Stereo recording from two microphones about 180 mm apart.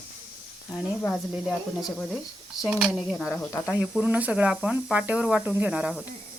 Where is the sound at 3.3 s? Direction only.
15° left (ahead or behind).